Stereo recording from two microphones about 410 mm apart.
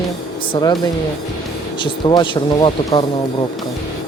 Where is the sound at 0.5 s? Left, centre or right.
Centre.